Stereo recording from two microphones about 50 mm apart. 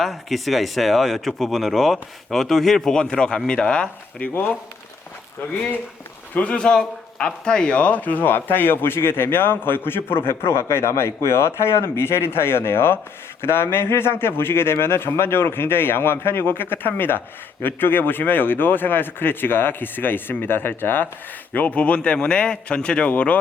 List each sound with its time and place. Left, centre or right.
0.0 s speech: centre
4.2 s speech: left
6.3 s speech: left
6.7 s a man's voice: centre; by 21.1 s left
21.5 s speech: left